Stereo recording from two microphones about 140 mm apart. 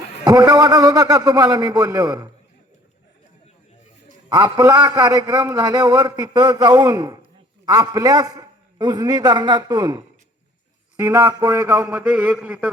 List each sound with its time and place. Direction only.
0.3 s a man's voice: 30° right (ahead or behind)
4.3 s a man's voice: 30° right (ahead or behind)
10.9 s a man's voice: 15° right (ahead or behind)